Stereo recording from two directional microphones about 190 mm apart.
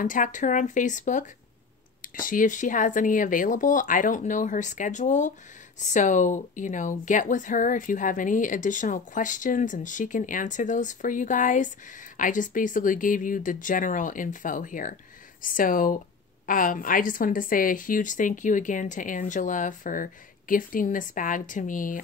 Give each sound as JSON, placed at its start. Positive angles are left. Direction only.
{"t": 0.0, "sound": "a woman's voice", "side_deg": 45}